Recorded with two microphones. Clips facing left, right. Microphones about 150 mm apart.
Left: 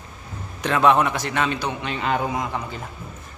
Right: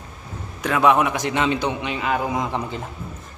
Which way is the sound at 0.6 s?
10° right (ahead or behind).